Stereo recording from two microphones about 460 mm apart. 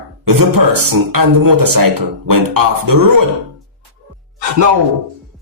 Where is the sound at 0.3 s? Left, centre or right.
Right.